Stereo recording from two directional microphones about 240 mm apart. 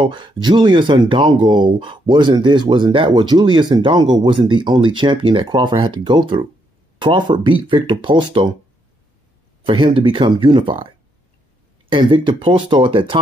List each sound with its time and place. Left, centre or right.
0.0 s speech: centre
9.7 s speech: right
11.9 s speech: right